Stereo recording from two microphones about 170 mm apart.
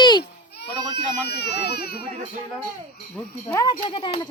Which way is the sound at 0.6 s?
75° left (ahead or behind).